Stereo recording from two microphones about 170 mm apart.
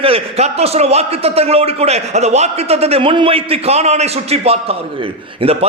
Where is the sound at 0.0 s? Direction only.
35° right (ahead or behind).